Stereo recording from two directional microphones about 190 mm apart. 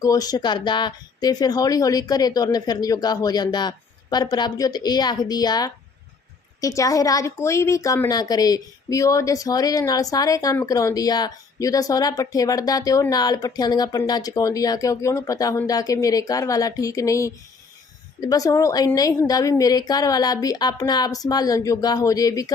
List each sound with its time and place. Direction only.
0.0 s a woman's voice: 20° left (ahead or behind)